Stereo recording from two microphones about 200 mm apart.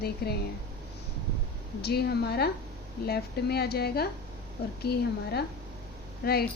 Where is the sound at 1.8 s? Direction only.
55° left (ahead or behind).